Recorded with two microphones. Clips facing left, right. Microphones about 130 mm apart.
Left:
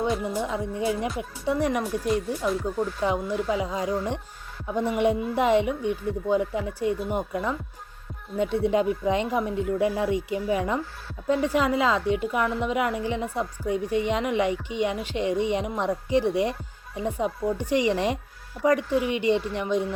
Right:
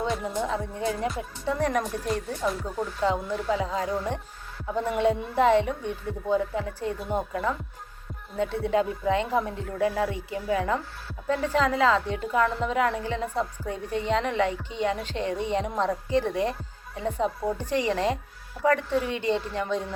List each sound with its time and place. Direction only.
0.4 s a woman's voice: 15° left (ahead or behind)
3.1 s a woman's voice: 15° left (ahead or behind)